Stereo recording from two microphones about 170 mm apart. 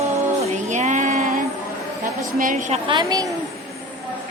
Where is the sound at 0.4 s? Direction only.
45° right (ahead or behind).